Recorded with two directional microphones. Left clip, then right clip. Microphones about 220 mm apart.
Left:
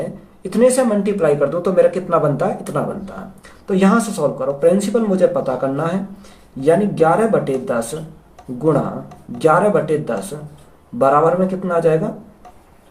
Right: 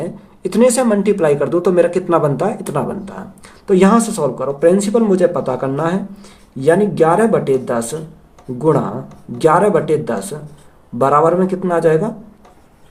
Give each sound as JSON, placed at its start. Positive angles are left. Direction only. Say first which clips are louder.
{"t": 0.4, "sound": "speech", "louder": "right 1 dB", "side_deg": -45}